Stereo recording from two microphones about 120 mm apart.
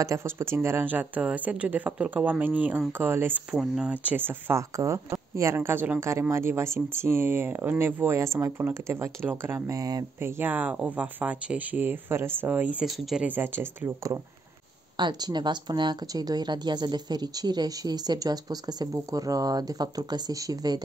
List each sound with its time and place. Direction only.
0.0 s speech: 25° right (ahead or behind)
10.2 s speech: 15° right (ahead or behind)
12.8 s speech: centre (ahead or behind)
13.3 s speech: 15° right (ahead or behind)
15.0 s speech: 35° right (ahead or behind)